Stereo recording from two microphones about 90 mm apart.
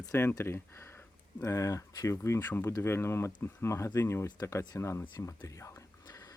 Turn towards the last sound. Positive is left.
turn(degrees=30)  # may be behind; listen again after turning